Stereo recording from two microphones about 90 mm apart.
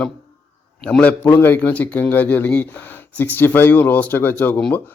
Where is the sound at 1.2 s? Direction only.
20° left (ahead or behind).